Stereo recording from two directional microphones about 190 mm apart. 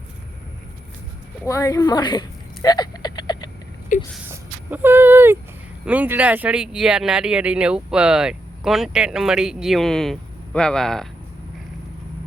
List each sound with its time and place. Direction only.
1.5 s a woman's voice: 15° left (ahead or behind)
2.6 s a sound: 20° left (ahead or behind)
4.1 s speech: 10° right (ahead or behind)